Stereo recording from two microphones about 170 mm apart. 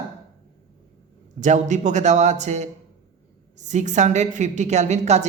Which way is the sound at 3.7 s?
45° right (ahead or behind).